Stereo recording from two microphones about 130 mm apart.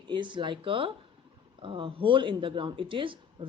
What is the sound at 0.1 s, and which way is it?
Speech, 40° right (ahead or behind).